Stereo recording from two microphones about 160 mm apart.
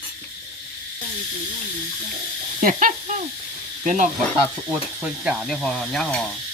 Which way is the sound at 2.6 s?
55° right (ahead or behind).